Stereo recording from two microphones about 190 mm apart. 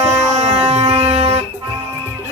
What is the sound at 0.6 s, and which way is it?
Music, 30° right (ahead or behind).